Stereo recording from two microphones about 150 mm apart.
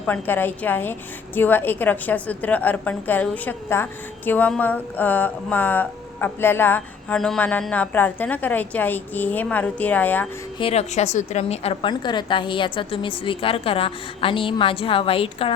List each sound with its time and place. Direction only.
0.0 s speech: 10° left (ahead or behind)
10.6 s a woman's voice: 45° left (ahead or behind)